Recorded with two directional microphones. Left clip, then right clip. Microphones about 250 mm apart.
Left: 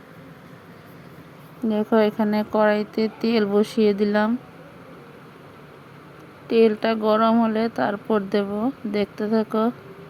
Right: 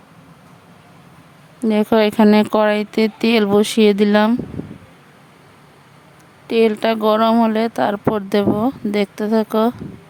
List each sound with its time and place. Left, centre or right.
1.6 s a woman's voice: right
6.5 s a woman's voice: right